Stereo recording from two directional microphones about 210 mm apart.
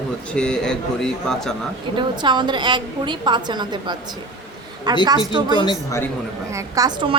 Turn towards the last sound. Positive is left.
turn(degrees=-20)  # may be behind; listen again after turning